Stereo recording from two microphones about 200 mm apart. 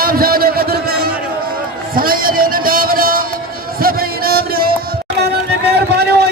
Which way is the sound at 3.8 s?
45° right (ahead or behind).